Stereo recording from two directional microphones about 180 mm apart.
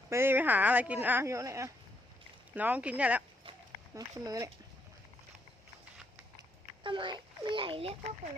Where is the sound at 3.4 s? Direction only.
30° right (ahead or behind).